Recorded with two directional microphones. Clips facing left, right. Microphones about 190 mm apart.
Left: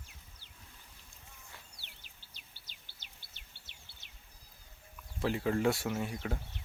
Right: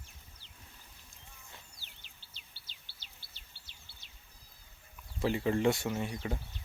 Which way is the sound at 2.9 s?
50° left (ahead or behind).